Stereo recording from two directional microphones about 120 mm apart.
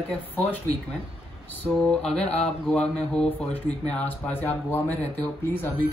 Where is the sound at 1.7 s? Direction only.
5° left (ahead or behind).